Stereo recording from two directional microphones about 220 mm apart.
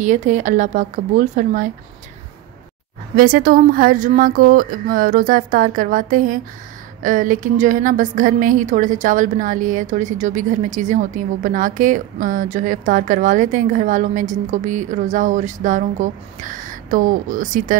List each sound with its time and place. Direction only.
0.0 s a woman's voice: 35° right (ahead or behind)
3.2 s a woman's voice: 40° right (ahead or behind)